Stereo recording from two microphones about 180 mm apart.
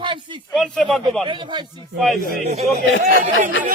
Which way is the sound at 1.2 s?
25° right (ahead or behind).